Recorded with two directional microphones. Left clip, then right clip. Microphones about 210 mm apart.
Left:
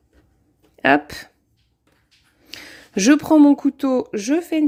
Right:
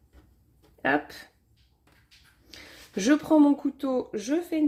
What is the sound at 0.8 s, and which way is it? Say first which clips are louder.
Speech: left 10 dB; 45° left (ahead or behind).